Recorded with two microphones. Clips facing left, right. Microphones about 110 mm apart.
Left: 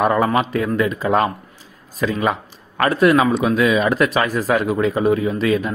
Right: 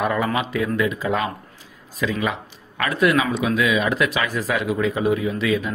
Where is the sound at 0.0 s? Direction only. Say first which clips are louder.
Left 5 dB; 40° left (ahead or behind).